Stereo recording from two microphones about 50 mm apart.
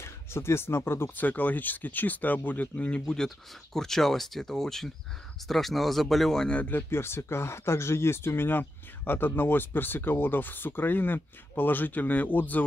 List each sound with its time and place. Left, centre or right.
0.0 s speech: left
1.1 s speech: left
3.7 s speech: centre
6.7 s speech: left